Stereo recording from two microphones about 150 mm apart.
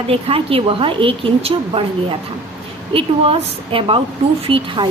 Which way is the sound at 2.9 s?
40° right (ahead or behind).